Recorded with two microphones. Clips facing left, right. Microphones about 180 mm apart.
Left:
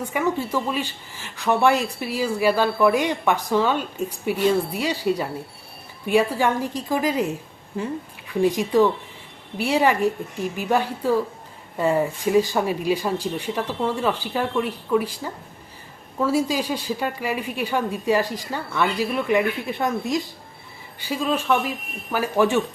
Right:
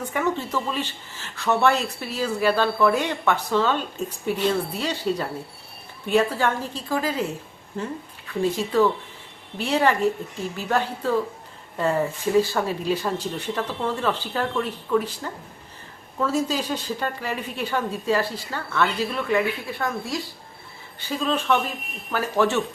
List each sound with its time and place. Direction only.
0.0 s a woman's voice: 10° left (ahead or behind)
8.3 s a woman's voice: 15° left (ahead or behind)